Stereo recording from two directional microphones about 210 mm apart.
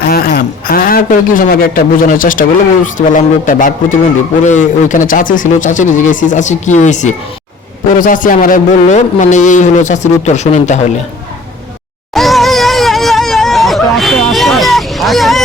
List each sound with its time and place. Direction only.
0.0 s a man's voice: 45° left (ahead or behind)
12.1 s hubbub: centre (ahead or behind)